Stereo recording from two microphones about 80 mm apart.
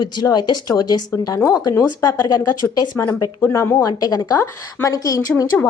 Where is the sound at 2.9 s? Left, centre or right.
Left.